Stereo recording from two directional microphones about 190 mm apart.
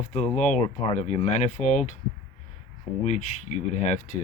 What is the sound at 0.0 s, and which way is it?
Speech, 40° left (ahead or behind).